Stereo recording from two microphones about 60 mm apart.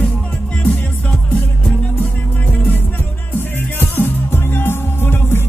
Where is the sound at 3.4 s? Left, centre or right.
Left.